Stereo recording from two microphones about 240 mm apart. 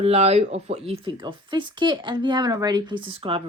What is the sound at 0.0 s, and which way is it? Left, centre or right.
A woman's voice, right.